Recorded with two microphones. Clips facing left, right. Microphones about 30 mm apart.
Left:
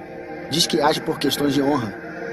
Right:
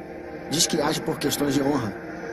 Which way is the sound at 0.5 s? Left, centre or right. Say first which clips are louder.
Left 5 dB; left.